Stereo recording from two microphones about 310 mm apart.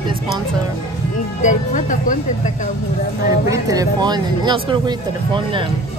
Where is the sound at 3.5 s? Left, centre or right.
Centre.